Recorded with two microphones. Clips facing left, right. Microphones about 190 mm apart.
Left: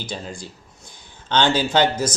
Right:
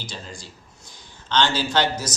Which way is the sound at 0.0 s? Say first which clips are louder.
Left 6 dB; 55° left (ahead or behind).